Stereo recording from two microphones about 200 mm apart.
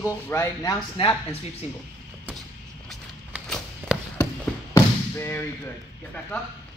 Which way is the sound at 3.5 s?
5° left (ahead or behind).